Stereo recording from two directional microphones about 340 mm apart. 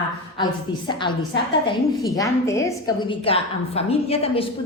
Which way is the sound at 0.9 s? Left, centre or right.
Centre.